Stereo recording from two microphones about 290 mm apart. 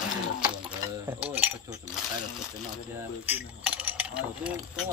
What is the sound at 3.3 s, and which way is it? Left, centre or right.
Speech, centre.